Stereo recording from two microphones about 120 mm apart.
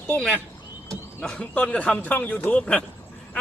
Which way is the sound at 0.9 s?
5° left (ahead or behind).